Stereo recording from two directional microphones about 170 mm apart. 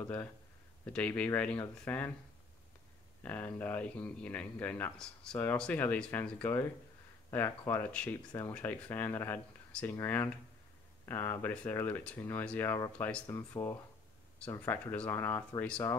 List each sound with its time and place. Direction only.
0.0 s speech: 10° left (ahead or behind)
3.3 s speech: 10° left (ahead or behind)